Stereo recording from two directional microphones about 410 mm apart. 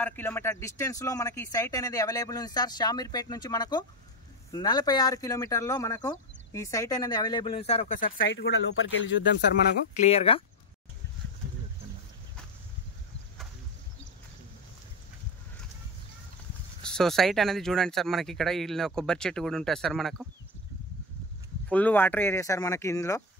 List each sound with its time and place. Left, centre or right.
0.0 s speech: centre; by 9.3 s left
9.9 s speech: centre
16.8 s speech: centre
21.6 s speech: centre